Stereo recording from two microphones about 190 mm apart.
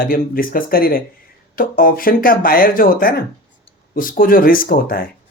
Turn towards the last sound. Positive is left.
turn(degrees=50)  # may be behind; listen again after turning